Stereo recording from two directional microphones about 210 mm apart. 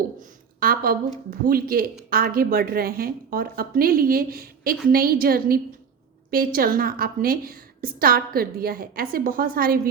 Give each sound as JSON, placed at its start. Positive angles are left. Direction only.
{"t": 0.6, "sound": "a woman's voice", "side_deg": -45}